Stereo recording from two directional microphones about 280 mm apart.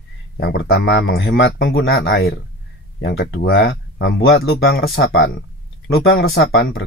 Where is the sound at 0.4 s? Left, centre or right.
Left.